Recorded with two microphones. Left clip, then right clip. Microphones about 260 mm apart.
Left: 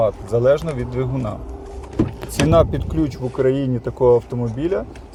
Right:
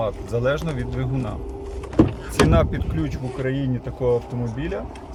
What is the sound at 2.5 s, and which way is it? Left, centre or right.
Speech, centre.